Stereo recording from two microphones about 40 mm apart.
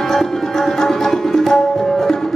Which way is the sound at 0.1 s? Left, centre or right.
Centre.